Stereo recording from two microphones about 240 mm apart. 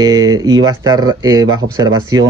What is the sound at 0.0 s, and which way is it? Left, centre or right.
Speech, centre.